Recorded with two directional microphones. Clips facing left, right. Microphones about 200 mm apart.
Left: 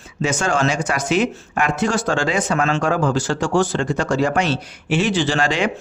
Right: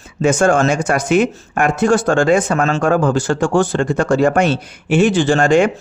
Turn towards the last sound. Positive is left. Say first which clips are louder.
# right 7 dB
turn(degrees=-50)  # may be behind; listen again after turning